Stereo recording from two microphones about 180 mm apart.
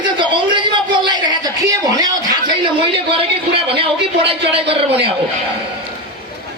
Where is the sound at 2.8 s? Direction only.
30° right (ahead or behind).